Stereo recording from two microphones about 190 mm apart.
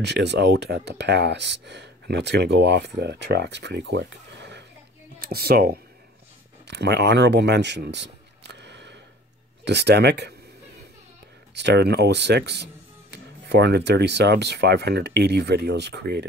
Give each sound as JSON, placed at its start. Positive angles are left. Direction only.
{"t": 0.0, "sound": "speech", "side_deg": -65}
{"t": 8.5, "sound": "a sound", "side_deg": -65}
{"t": 9.7, "sound": "speech", "side_deg": -60}
{"t": 11.5, "sound": "speech", "side_deg": -65}